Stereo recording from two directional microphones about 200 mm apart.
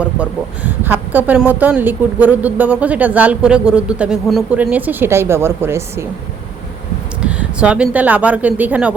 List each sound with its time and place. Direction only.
0.0 s a woman's voice: 5° right (ahead or behind)
7.2 s speech: 5° right (ahead or behind)